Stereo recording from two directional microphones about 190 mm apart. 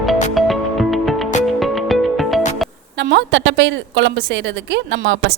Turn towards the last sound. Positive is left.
turn(degrees=-70)  # may be behind; listen again after turning